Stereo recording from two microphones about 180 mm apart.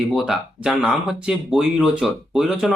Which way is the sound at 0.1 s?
Centre (ahead or behind).